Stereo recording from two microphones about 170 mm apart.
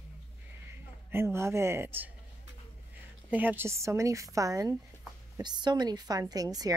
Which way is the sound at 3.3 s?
10° right (ahead or behind).